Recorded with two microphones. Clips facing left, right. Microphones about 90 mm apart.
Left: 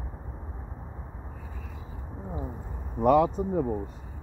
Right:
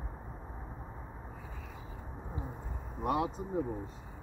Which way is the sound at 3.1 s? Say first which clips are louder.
Left 11 dB; 50° left (ahead or behind).